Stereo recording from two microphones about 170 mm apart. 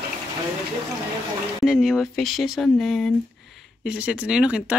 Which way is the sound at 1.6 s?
Centre (ahead or behind).